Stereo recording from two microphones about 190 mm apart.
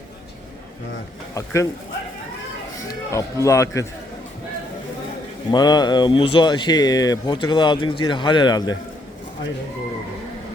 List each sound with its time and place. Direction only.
1.3 s a man's voice: 15° left (ahead or behind)
3.1 s a man's voice: 15° left (ahead or behind)
5.5 s speech: 20° left (ahead or behind)